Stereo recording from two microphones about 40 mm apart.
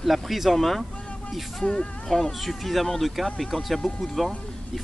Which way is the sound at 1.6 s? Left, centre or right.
Left.